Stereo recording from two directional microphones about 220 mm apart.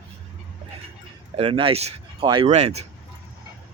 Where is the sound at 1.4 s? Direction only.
25° right (ahead or behind).